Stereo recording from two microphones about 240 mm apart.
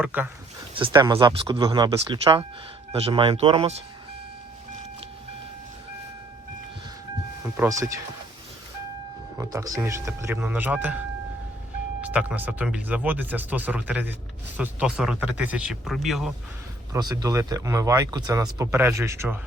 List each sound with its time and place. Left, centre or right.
0.0 s speech: centre
0.7 s speech: centre
7.4 s speech: centre
9.4 s speech: centre
12.0 s speech: centre
16.9 s speech: centre